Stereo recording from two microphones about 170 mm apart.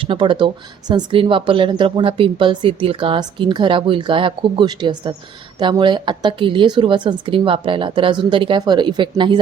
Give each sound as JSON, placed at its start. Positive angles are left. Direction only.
{"t": 0.0, "sound": "speech", "side_deg": -30}